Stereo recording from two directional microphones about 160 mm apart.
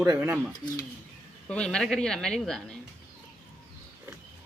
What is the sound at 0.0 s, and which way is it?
Speech, 15° right (ahead or behind).